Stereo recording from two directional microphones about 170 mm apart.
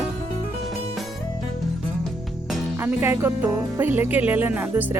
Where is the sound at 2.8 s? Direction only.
15° right (ahead or behind).